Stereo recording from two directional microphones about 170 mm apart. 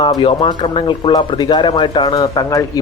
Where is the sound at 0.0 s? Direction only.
30° left (ahead or behind).